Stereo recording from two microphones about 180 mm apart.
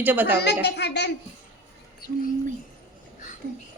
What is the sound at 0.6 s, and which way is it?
Speech, 70° left (ahead or behind).